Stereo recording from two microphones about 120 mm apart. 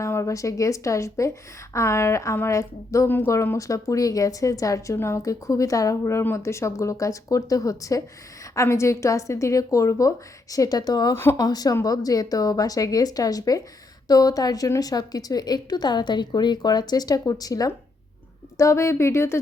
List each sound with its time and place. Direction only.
0.0 s a woman's voice: 25° left (ahead or behind)